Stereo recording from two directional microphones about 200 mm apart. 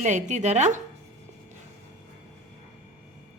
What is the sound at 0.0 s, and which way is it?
Speech, 35° right (ahead or behind).